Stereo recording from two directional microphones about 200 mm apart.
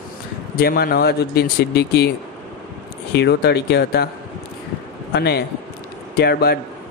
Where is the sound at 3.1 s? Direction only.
55° left (ahead or behind).